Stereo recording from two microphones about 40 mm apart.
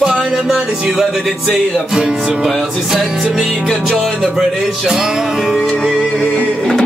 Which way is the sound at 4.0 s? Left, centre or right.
Centre.